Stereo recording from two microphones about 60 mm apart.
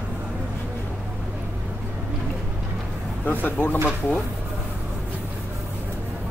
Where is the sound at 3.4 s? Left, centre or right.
Left.